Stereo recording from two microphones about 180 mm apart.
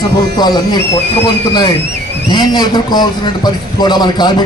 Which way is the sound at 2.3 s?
25° left (ahead or behind).